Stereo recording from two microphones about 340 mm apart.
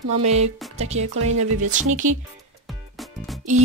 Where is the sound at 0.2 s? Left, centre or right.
Centre.